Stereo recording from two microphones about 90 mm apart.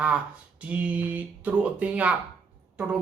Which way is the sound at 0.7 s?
15° right (ahead or behind).